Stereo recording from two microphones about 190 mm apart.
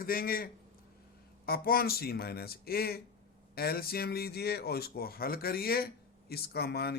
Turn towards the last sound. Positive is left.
turn(degrees=55)  # may be behind; listen again after turning